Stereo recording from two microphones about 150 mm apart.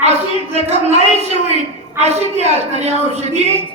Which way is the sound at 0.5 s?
45° right (ahead or behind).